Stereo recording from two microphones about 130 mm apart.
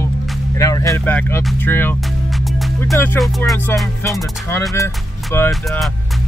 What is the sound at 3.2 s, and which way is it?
Music, centre (ahead or behind).